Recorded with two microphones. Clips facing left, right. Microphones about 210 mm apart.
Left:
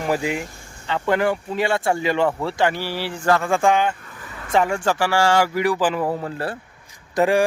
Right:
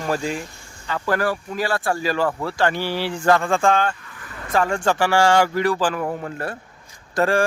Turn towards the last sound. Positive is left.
turn(degrees=15)  # may be behind; listen again after turning